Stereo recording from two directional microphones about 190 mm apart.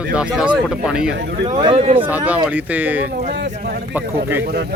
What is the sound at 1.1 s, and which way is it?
Speech, 65° right (ahead or behind).